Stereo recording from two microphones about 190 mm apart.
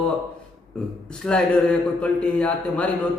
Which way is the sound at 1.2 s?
5° left (ahead or behind).